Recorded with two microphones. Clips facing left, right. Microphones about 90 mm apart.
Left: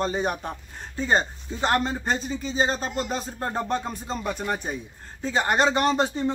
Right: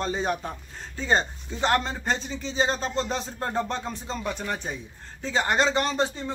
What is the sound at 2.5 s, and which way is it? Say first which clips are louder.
Speech: even; 40° left (ahead or behind).